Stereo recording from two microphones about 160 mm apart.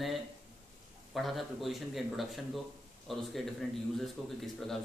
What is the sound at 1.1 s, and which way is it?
Speech, centre (ahead or behind).